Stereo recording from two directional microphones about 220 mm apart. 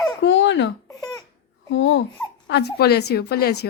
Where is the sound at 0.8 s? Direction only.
15° left (ahead or behind).